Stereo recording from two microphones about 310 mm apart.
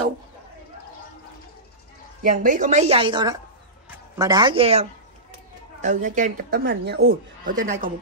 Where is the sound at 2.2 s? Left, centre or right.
Right.